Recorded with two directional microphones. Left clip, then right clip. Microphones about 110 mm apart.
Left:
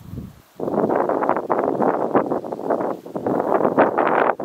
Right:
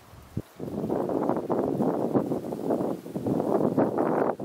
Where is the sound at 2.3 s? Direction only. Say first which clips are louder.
Left 7 dB; 60° left (ahead or behind).